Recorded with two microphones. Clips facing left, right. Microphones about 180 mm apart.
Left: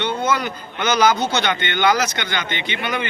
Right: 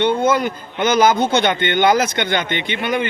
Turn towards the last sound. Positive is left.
turn(degrees=-50)  # may be behind; listen again after turning